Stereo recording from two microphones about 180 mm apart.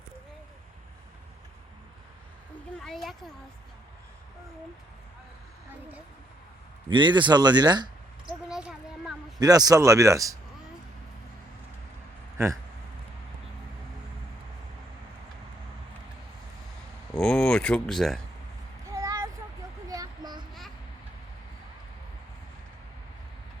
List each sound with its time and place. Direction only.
2.8 s speech: centre (ahead or behind)
6.8 s speech: 25° right (ahead or behind)
8.4 s a sound: 5° right (ahead or behind)
9.4 s speech: 20° right (ahead or behind)
17.2 s speech: 5° left (ahead or behind)
18.9 s a sound: 20° right (ahead or behind)